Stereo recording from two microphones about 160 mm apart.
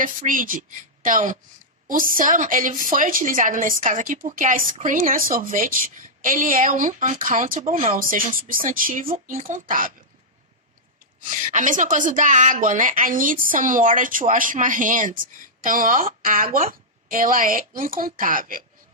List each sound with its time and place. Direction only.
0.0 s a woman's voice: 55° right (ahead or behind)
11.2 s a woman's voice: 55° right (ahead or behind)